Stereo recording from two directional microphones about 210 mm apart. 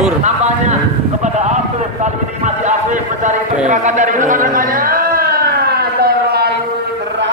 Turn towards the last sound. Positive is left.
turn(degrees=-50)  # may be behind; listen again after turning